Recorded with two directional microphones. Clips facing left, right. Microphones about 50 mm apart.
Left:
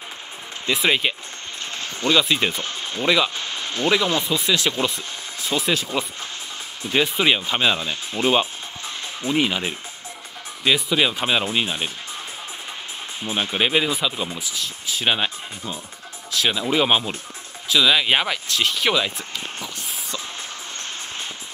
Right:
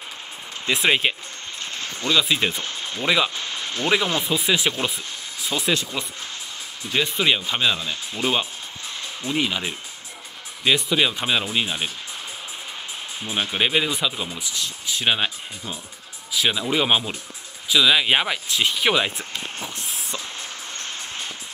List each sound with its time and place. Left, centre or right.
0.8 s speech: centre
2.0 s speech: centre
2.2 s speech: centre
5.5 s speech: centre
6.9 s speech: centre
13.2 s speech: centre
19.0 s a sound: right